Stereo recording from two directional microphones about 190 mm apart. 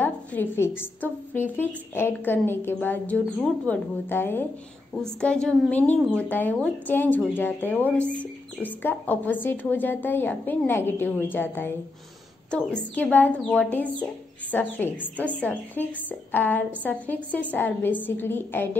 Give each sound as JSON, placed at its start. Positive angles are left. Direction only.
{"t": 0.0, "sound": "a woman's voice", "side_deg": 10}